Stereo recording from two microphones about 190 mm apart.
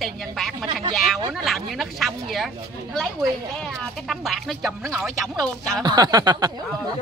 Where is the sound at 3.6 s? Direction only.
Centre (ahead or behind).